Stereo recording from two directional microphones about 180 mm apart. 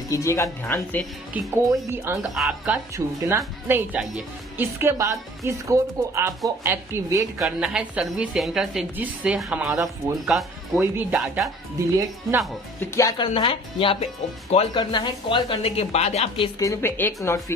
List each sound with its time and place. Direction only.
0.1 s a woman's voice: 15° left (ahead or behind)
1.3 s a woman's voice: 10° right (ahead or behind)
7.3 s a woman's voice: 5° right (ahead or behind)
12.8 s a woman's voice: 20° left (ahead or behind)
13.3 s speech: 30° left (ahead or behind)
16.3 s a woman's voice: 20° left (ahead or behind)